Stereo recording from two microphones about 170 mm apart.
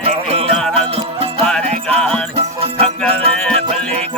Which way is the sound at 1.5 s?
5° left (ahead or behind).